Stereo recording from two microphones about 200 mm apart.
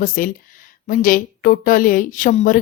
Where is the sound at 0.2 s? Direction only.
45° left (ahead or behind).